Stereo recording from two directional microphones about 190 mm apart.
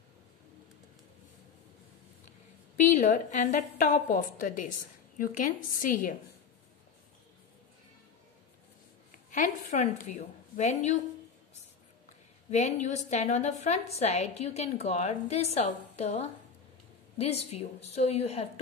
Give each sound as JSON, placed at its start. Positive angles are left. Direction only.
{"t": 2.8, "sound": "a woman's voice", "side_deg": 40}
{"t": 9.3, "sound": "a woman's voice", "side_deg": 40}
{"t": 12.4, "sound": "a woman's voice", "side_deg": 35}